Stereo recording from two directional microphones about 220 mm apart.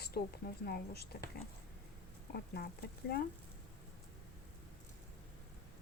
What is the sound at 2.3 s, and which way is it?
Speech, 45° left (ahead or behind).